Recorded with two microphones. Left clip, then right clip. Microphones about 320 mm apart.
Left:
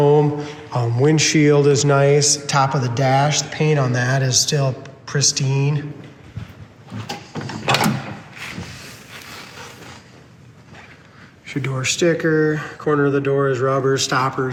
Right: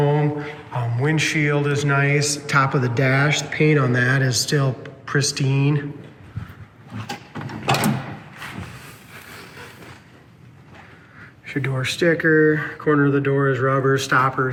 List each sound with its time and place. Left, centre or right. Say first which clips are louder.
0.0 s mantra: left 6 dB; centre
1.0 s a man's voice: left 5 dB; centre
6.9 s a sound: left 2 dB; centre
11.4 s speech: left 2 dB; centre